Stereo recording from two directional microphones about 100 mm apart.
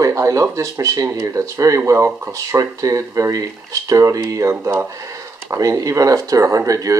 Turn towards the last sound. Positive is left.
turn(degrees=-35)  # may be behind; listen again after turning